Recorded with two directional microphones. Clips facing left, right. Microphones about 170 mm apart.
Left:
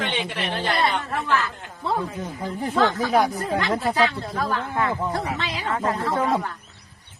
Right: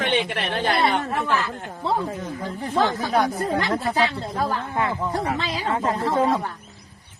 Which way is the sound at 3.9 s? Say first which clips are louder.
Left 1 dB; 20° right (ahead or behind).